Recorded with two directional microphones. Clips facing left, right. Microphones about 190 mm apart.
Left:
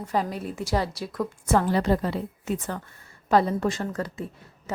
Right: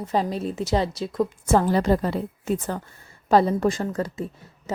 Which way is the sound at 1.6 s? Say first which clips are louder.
Right 2 dB; 40° right (ahead or behind).